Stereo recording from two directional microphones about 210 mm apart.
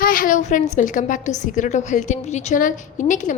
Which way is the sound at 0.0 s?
40° left (ahead or behind).